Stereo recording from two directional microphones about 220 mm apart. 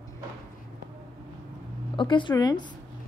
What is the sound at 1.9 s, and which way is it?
Speech, 20° left (ahead or behind).